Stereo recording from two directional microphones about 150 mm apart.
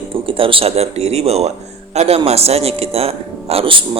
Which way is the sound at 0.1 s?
35° right (ahead or behind).